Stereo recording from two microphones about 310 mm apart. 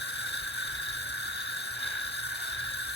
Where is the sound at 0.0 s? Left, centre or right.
Left.